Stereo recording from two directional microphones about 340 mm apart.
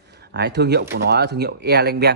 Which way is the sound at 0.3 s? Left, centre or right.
Right.